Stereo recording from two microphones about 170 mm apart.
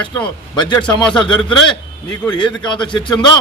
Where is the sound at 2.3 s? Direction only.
25° left (ahead or behind).